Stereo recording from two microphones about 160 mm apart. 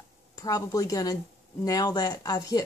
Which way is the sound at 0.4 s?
20° left (ahead or behind).